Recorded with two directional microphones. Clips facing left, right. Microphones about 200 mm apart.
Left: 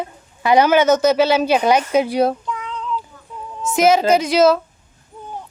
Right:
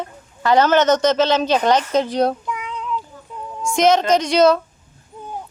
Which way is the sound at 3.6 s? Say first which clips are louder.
Left 1 dB; 5° left (ahead or behind).